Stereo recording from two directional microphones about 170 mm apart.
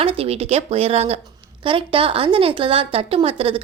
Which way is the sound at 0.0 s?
35° right (ahead or behind).